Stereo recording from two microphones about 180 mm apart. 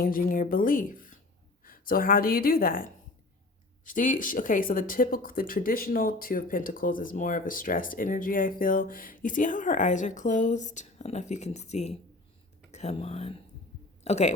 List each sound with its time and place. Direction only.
0.0 s speech: 50° left (ahead or behind)